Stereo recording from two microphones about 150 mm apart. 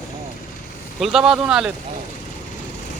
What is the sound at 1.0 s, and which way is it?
Speech, 5° right (ahead or behind).